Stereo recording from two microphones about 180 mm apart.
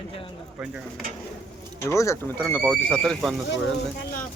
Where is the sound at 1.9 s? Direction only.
15° left (ahead or behind).